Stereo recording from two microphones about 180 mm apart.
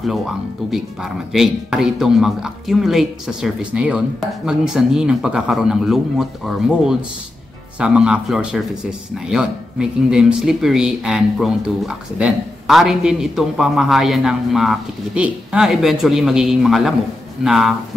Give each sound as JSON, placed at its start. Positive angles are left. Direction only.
{"t": 0.7, "sound": "speech", "side_deg": 0}